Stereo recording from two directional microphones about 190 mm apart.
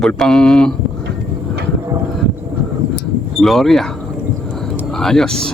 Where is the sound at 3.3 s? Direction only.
Centre (ahead or behind).